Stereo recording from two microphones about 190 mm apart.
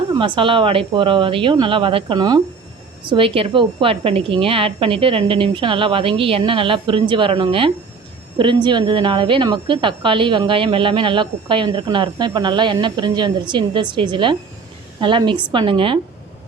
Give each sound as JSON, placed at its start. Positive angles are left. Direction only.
{"t": 0.1, "sound": "a woman's voice", "side_deg": -25}